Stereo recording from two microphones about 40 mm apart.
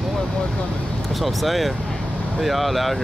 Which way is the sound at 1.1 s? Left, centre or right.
Centre.